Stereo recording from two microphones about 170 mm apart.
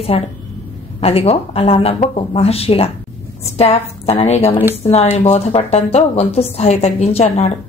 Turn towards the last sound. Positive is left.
turn(degrees=40)  # may be behind; listen again after turning